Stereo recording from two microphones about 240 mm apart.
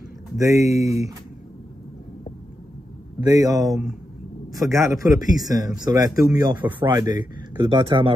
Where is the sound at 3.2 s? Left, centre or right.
Centre.